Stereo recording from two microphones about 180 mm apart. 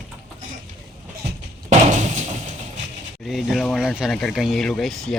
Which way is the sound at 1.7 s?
40° right (ahead or behind).